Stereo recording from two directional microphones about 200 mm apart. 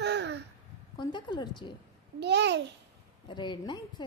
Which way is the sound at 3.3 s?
20° left (ahead or behind).